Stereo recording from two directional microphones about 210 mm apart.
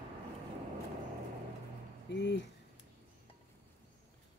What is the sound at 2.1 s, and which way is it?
Speech, 55° left (ahead or behind).